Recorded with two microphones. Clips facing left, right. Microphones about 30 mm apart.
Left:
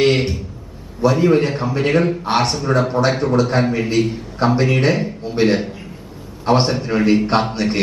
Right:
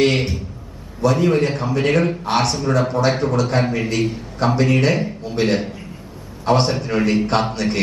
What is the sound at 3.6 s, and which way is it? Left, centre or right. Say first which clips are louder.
Speech: left 2 dB; centre.